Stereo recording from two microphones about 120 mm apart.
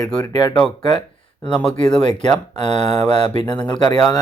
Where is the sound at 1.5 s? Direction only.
5° left (ahead or behind).